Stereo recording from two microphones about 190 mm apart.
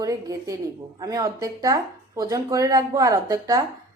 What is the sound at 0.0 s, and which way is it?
A woman's voice, 15° right (ahead or behind).